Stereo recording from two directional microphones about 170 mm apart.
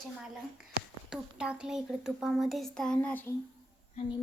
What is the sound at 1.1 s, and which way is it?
A woman's voice, 5° right (ahead or behind).